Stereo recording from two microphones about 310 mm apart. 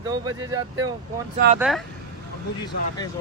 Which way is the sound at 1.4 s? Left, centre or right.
Right.